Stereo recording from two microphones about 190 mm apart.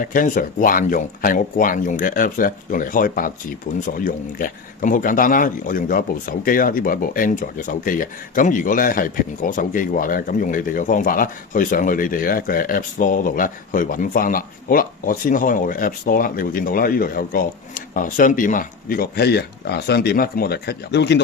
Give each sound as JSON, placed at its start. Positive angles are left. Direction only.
{"t": 0.0, "sound": "speech", "side_deg": 45}